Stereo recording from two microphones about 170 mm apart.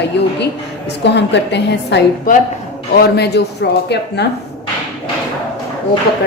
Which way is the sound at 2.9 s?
75° left (ahead or behind).